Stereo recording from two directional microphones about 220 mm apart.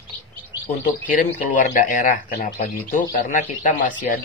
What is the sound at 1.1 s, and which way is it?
Speech, 35° left (ahead or behind).